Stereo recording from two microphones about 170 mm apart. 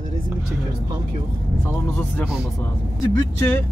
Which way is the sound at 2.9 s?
20° left (ahead or behind).